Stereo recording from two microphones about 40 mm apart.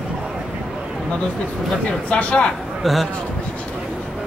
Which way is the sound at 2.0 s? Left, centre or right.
Left.